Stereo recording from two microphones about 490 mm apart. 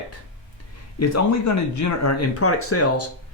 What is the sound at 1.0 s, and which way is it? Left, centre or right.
Speech, left.